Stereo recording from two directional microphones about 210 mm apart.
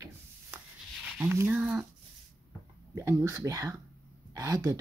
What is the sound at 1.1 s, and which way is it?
Speech, 10° right (ahead or behind).